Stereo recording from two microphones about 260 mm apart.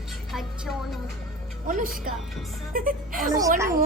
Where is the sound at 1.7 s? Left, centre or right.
Right.